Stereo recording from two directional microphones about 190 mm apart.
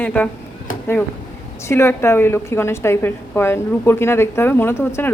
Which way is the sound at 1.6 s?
15° left (ahead or behind).